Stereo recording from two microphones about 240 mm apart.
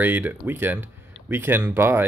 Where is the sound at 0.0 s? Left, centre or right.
Centre.